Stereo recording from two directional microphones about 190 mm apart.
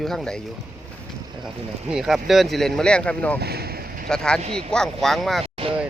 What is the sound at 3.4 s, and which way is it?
Boat, 55° right (ahead or behind).